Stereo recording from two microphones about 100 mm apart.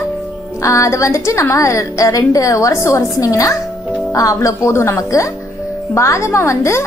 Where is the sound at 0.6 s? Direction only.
30° left (ahead or behind).